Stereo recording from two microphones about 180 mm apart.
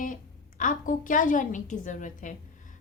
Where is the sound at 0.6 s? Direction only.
45° left (ahead or behind).